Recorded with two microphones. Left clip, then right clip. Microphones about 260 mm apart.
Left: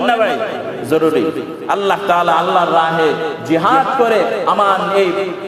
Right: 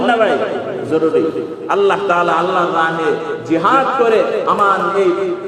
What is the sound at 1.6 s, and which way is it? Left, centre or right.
A man's voice, left.